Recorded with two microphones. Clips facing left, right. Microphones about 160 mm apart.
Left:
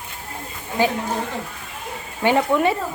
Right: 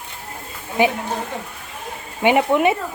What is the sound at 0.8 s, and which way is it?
Speech, 20° right (ahead or behind).